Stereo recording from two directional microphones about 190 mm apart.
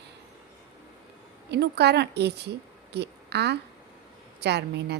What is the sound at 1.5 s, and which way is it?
A woman's voice, 60° right (ahead or behind).